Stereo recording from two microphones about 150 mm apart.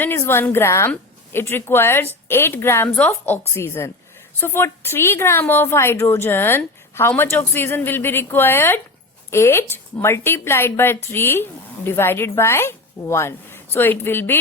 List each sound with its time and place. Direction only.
0.0 s a woman's voice: 15° left (ahead or behind)